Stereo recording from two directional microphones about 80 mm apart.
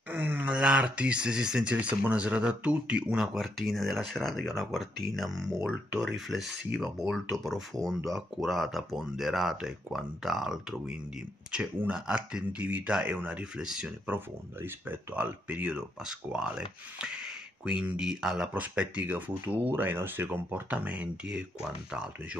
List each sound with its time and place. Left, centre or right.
0.1 s a sound: right
0.6 s speech: centre
14.1 s speech: right; by 18.5 s centre
18.5 s speech: centre